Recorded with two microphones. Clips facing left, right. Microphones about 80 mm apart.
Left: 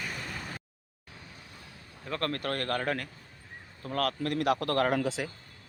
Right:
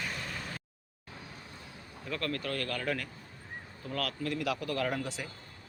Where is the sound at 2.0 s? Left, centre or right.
Left.